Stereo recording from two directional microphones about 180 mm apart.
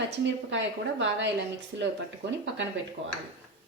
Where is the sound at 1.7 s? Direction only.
70° right (ahead or behind).